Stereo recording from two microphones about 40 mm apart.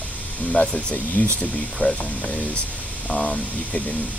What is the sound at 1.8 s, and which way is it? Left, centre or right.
Speech, left.